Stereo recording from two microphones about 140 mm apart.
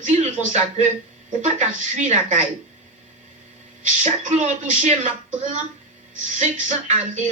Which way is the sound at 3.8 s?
60° right (ahead or behind).